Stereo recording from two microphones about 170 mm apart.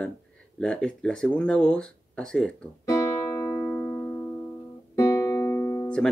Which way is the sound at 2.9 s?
20° left (ahead or behind).